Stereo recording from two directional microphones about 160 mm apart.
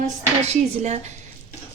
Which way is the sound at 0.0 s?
45° right (ahead or behind).